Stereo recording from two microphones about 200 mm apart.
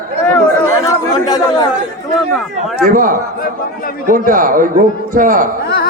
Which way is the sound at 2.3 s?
Centre (ahead or behind).